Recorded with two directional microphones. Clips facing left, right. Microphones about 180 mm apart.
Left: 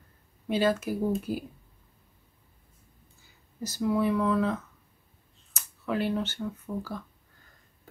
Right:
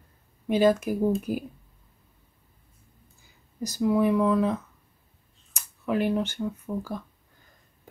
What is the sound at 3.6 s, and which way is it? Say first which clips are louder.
Speech: right 4 dB; 15° right (ahead or behind).